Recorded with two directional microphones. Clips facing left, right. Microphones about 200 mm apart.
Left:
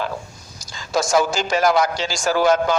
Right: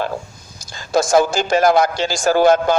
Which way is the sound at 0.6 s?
55° right (ahead or behind).